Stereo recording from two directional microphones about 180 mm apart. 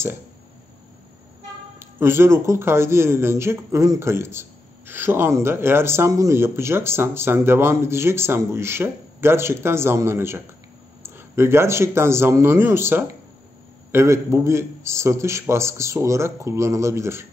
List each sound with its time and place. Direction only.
1.8 s speech: 15° right (ahead or behind)